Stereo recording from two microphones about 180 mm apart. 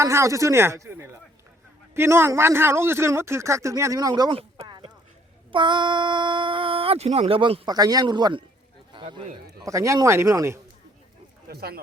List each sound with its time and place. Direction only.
0.0 s a man's voice: 15° right (ahead or behind)
8.9 s a sound: 25° right (ahead or behind)
9.6 s a man's voice: 15° right (ahead or behind)
11.4 s speech: 60° right (ahead or behind)